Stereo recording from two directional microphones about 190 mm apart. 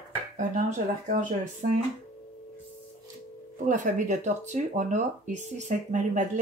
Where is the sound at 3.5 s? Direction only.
40° right (ahead or behind).